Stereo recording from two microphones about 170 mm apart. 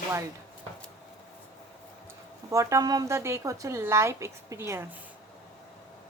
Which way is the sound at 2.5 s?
20° right (ahead or behind).